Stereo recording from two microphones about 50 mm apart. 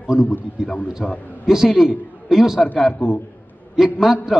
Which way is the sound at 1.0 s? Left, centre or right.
Centre.